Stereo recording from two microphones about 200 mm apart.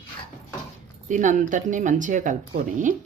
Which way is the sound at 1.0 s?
40° right (ahead or behind).